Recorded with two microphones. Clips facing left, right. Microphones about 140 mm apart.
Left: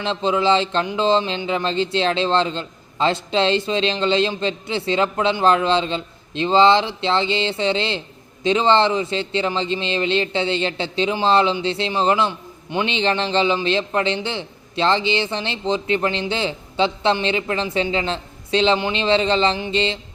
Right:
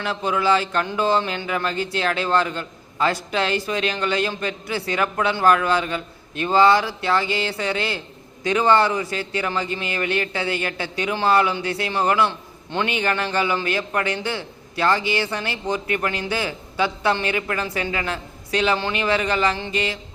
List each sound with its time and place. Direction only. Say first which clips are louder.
0.0 s a man's voice: left 3 dB; 25° left (ahead or behind)